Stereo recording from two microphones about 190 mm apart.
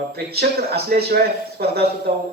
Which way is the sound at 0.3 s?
55° right (ahead or behind).